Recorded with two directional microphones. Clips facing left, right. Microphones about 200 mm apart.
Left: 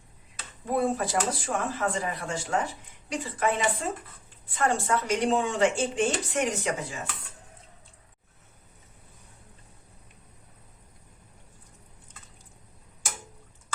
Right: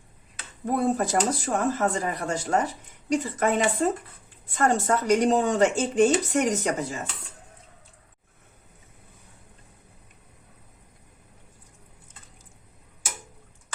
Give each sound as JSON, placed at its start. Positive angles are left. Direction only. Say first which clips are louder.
{"t": 0.6, "sound": "speech", "louder": "right 2 dB", "side_deg": -45}